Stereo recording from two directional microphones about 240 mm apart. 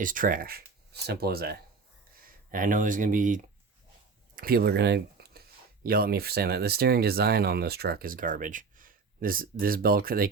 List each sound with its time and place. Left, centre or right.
0.0 s speech: right